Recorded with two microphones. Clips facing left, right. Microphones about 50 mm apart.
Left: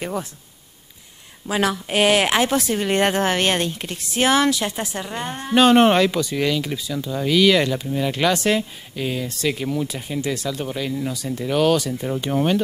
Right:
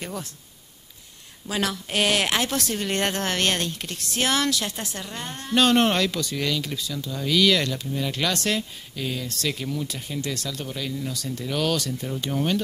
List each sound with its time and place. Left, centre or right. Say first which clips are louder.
0.0 s speech: left 7 dB; centre
1.5 s speech: left 5 dB; centre